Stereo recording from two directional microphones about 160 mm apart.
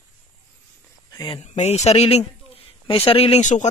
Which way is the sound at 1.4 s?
45° left (ahead or behind).